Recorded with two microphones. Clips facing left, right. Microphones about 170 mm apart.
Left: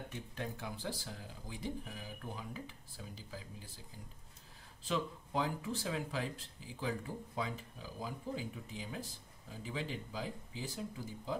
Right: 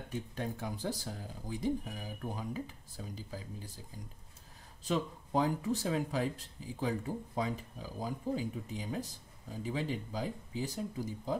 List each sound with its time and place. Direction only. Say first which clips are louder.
0.4 s speech: right 3 dB; 40° right (ahead or behind)
4.8 s speech: right 3 dB; 40° right (ahead or behind)